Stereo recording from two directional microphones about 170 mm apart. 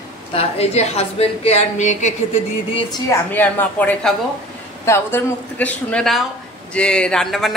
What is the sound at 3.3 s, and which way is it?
Speech, 10° left (ahead or behind).